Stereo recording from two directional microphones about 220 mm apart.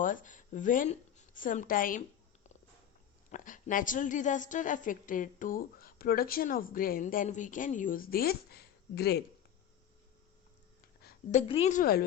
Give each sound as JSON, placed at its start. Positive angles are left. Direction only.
{"t": 0.0, "sound": "speech", "side_deg": 35}
{"t": 3.3, "sound": "a woman's voice", "side_deg": 35}
{"t": 11.0, "sound": "a woman's voice", "side_deg": 35}